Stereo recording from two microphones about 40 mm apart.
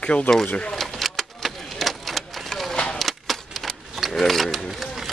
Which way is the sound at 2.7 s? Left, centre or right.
Centre.